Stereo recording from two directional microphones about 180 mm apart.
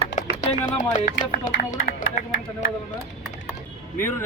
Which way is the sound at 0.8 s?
40° left (ahead or behind).